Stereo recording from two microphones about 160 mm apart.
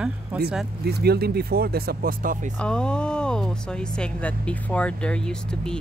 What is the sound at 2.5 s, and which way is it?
Speech, 5° left (ahead or behind).